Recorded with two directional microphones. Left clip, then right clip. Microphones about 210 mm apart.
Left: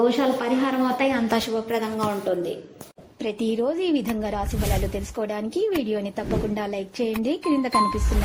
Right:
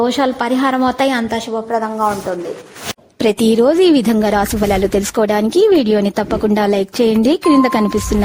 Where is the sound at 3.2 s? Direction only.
60° right (ahead or behind).